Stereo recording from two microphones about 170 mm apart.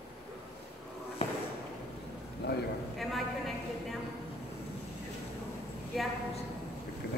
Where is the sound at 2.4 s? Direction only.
70° left (ahead or behind).